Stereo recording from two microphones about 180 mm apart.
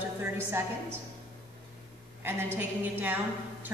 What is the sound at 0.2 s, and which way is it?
Speech, 15° right (ahead or behind).